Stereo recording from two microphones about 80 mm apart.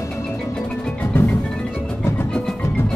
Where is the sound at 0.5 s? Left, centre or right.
Centre.